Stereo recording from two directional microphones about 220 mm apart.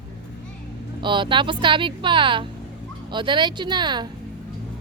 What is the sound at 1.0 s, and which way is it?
A woman's voice, 20° right (ahead or behind).